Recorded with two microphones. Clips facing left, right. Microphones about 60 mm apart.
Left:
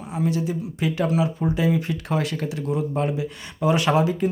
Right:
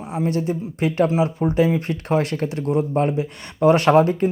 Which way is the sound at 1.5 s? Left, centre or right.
Right.